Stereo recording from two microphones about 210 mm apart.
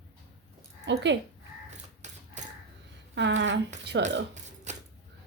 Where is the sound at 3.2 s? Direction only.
60° right (ahead or behind).